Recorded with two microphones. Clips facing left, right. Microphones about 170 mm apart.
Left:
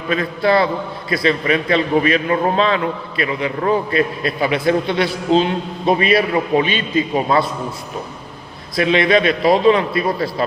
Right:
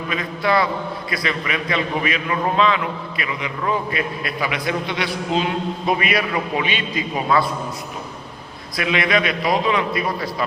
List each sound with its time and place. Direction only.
0.1 s a man's voice: 35° left (ahead or behind)
8.7 s a man's voice: 30° left (ahead or behind)